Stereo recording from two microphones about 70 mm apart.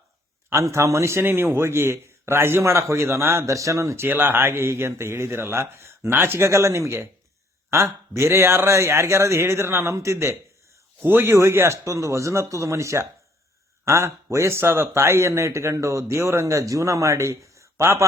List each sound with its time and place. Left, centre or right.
0.5 s a man's voice: right
4.0 s a man's voice: right
11.0 s a man's voice: right